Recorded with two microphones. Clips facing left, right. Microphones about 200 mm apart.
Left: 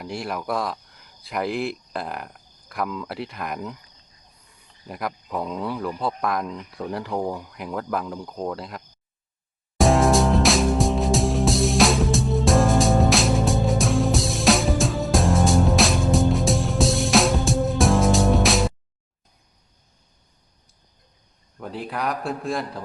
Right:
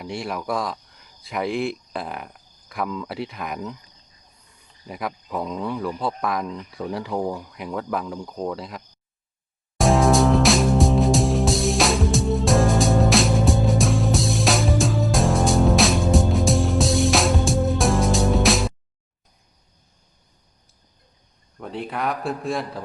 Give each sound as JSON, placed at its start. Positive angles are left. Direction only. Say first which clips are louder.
{"t": 0.0, "sound": "speech", "louder": "right 1 dB", "side_deg": 0}
{"t": 4.9, "sound": "speech", "louder": "even", "side_deg": 0}
{"t": 9.7, "sound": "music", "louder": "even", "side_deg": 0}
{"t": 21.6, "sound": "speech", "louder": "right 1 dB", "side_deg": 0}